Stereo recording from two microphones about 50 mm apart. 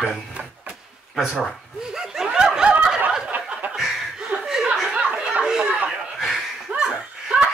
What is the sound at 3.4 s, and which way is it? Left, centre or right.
Chuckle, right.